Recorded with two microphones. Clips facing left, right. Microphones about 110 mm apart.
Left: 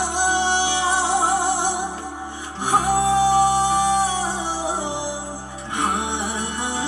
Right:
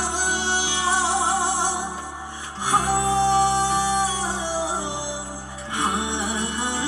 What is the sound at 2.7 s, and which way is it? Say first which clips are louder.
Music: left 3 dB; 15° left (ahead or behind).